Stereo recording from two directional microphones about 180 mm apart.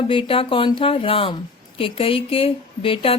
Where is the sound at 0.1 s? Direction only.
30° left (ahead or behind).